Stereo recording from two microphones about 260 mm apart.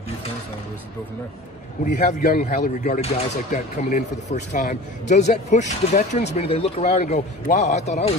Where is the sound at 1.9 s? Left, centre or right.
Left.